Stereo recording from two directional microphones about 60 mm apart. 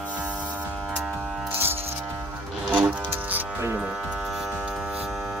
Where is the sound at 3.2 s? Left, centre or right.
Right.